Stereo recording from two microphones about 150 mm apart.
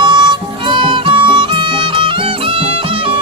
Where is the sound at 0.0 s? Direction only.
30° right (ahead or behind).